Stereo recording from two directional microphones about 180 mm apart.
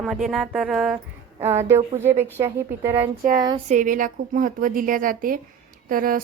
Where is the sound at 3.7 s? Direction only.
45° right (ahead or behind).